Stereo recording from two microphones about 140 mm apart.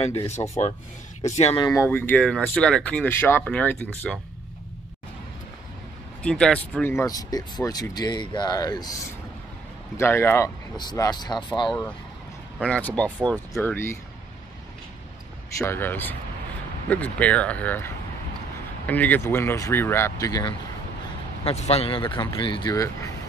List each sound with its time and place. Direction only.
0.0 s speech: 45° left (ahead or behind)
1.6 s speech: 25° left (ahead or behind)
1.9 s speech: 10° left (ahead or behind)
6.2 s speech: 5° left (ahead or behind)
6.9 s speech: 20° left (ahead or behind)
10.8 s speech: 30° left (ahead or behind)
12.5 s speech: 10° left (ahead or behind)
15.6 s speech: 15° left (ahead or behind)
21.5 s speech: 50° left (ahead or behind); by 23.1 s 25° left (ahead or behind)